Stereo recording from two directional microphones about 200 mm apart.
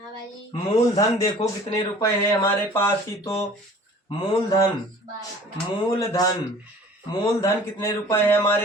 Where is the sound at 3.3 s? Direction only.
30° left (ahead or behind).